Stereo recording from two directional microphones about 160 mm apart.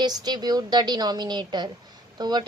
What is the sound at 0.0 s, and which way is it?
A woman's voice, 25° right (ahead or behind).